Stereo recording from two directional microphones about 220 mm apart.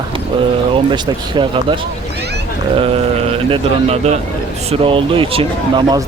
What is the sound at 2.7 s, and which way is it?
Speech, 25° right (ahead or behind).